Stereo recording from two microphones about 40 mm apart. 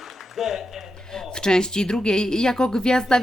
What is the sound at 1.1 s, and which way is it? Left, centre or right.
Speech, centre.